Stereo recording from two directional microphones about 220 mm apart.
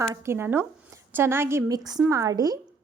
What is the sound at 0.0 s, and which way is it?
A woman's voice, 10° right (ahead or behind).